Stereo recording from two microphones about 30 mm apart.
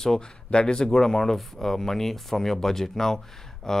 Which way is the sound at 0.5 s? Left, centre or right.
Left.